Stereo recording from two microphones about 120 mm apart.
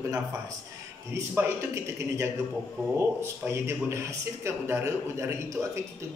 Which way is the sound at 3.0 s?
20° right (ahead or behind).